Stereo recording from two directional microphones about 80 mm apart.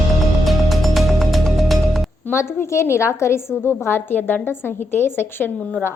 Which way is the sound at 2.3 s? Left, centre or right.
Left.